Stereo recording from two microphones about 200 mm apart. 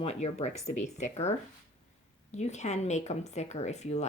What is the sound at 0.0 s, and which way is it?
A woman's voice, 30° left (ahead or behind).